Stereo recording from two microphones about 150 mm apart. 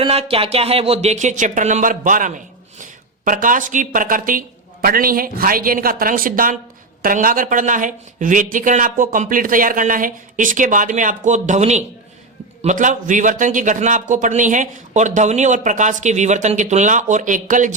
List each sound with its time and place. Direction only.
0.0 s a man's voice: 40° right (ahead or behind); by 17.7 s 60° right (ahead or behind)